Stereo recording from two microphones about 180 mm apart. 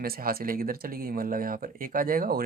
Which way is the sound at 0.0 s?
55° right (ahead or behind).